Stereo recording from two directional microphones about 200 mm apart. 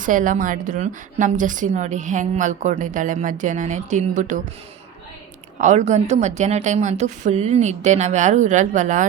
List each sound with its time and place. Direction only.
0.0 s a woman's voice: 40° right (ahead or behind)
5.5 s a woman's voice: 35° right (ahead or behind)